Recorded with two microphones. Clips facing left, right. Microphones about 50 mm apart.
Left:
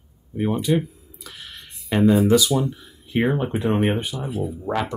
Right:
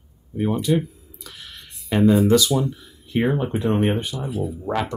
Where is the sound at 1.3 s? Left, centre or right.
Centre.